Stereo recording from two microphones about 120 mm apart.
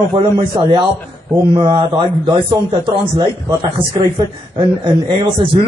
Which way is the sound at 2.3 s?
60° right (ahead or behind).